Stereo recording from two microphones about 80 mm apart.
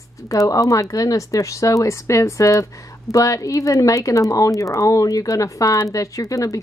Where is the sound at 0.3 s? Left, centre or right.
Left.